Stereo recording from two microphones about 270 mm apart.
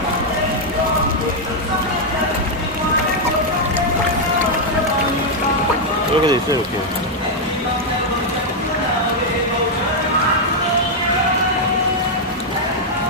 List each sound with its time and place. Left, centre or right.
6.2 s speech: centre